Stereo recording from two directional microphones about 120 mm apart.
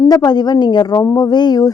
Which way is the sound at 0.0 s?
30° left (ahead or behind).